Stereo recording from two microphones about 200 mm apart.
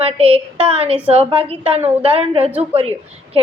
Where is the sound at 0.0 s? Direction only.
30° right (ahead or behind).